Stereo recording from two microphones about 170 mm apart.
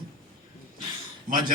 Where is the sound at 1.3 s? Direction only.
55° right (ahead or behind).